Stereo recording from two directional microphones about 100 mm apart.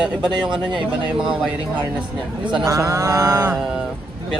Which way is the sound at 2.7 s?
30° right (ahead or behind).